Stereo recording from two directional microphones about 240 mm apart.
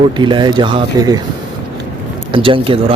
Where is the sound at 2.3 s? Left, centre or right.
Right.